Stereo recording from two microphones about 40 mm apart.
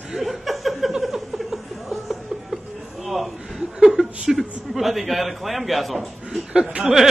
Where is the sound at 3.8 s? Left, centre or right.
Centre.